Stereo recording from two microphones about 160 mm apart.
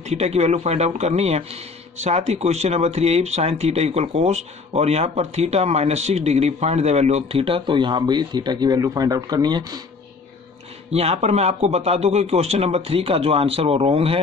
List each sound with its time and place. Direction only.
0.0 s speech: 40° right (ahead or behind); by 9.8 s 25° right (ahead or behind)
10.9 s speech: 40° right (ahead or behind)